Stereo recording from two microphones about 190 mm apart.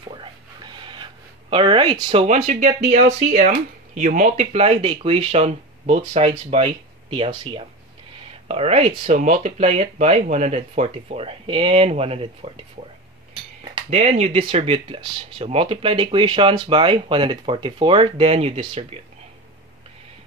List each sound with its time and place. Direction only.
0.1 s a sound: 25° right (ahead or behind)
1.5 s speech: 30° right (ahead or behind)
2.2 s speech: 35° right (ahead or behind)
13.7 s speech: 35° right (ahead or behind)